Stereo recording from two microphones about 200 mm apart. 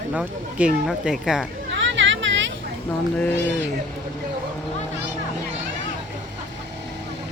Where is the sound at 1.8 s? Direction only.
65° right (ahead or behind).